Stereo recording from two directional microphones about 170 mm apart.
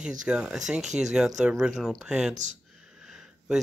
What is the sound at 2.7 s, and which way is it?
Sniff, 5° right (ahead or behind).